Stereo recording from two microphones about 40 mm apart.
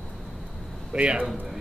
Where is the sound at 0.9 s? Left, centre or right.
Right.